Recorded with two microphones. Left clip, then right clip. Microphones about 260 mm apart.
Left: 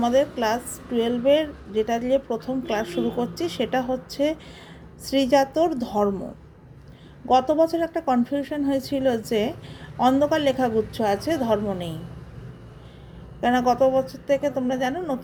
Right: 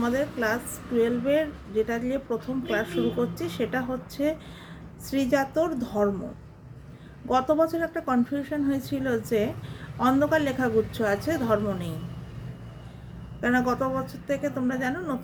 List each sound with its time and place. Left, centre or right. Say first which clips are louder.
0.0 s a woman's voice: left 6 dB; centre
5.0 s a woman's voice: left 6 dB; centre
7.3 s a woman's voice: left 4 dB; centre
13.4 s a woman's voice: left 6 dB; centre